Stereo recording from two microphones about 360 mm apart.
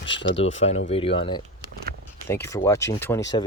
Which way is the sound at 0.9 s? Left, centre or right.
Centre.